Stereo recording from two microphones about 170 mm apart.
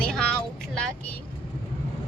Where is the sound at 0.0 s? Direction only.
5° left (ahead or behind).